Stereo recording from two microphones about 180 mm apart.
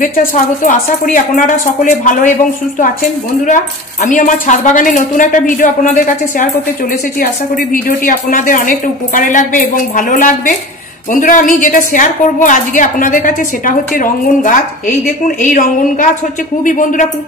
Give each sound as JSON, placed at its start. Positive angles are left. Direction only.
{"t": 0.0, "sound": "a woman's voice", "side_deg": 50}
{"t": 3.4, "sound": "a woman's voice", "side_deg": 45}